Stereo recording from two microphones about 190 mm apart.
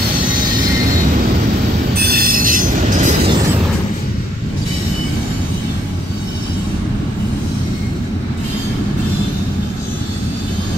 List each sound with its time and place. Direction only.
2.0 s train: 50° right (ahead or behind)